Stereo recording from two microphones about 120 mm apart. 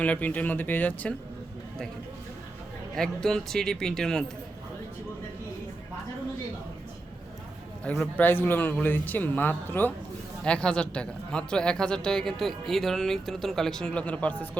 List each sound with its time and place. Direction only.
0.0 s speech: 15° left (ahead or behind)
2.9 s speech: 5° left (ahead or behind)
7.9 s speech: 10° left (ahead or behind)